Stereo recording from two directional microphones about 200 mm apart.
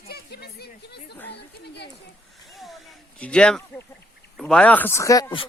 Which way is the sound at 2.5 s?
Centre (ahead or behind).